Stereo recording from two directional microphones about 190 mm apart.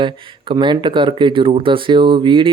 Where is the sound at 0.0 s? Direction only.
25° right (ahead or behind).